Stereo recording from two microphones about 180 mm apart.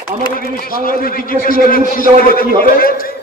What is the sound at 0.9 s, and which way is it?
A man's voice, 50° left (ahead or behind).